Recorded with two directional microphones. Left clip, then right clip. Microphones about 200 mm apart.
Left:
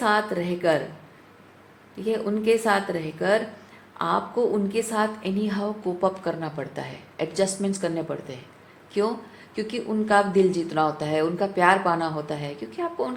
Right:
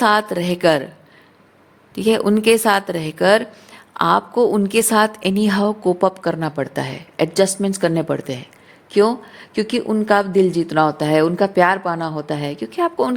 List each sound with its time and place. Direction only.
0.0 s a woman's voice: 60° right (ahead or behind)
2.0 s a woman's voice: 60° right (ahead or behind)